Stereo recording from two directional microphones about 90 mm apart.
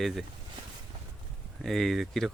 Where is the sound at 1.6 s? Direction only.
Centre (ahead or behind).